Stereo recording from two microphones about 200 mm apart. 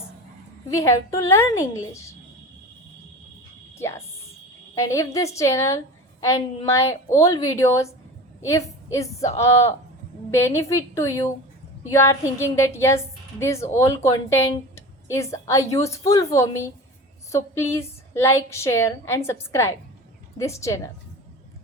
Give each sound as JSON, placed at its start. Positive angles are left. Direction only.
{"t": 0.8, "sound": "a woman's voice", "side_deg": 15}
{"t": 3.8, "sound": "a woman's voice", "side_deg": 15}